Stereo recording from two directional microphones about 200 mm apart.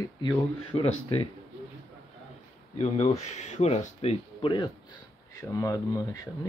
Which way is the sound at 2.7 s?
35° left (ahead or behind).